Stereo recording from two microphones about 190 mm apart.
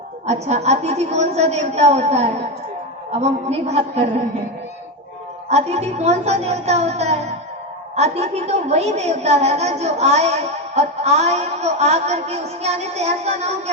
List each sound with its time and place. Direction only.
0.3 s a woman's voice: 35° right (ahead or behind)
5.5 s a woman's voice: 35° right (ahead or behind)